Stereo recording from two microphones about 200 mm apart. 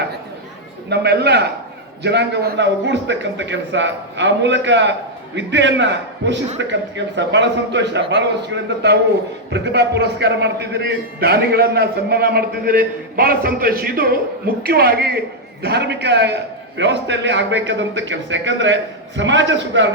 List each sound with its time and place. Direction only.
0.9 s a man's voice: 55° right (ahead or behind)